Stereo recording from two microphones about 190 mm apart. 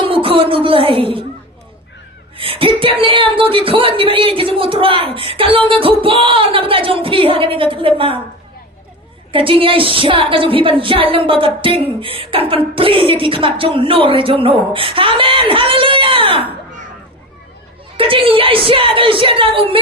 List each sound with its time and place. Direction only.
0.0 s speech: 30° right (ahead or behind)
2.4 s a woman's voice: 30° right (ahead or behind)
9.3 s a woman's voice: 30° right (ahead or behind)
17.9 s a woman's voice: 30° right (ahead or behind)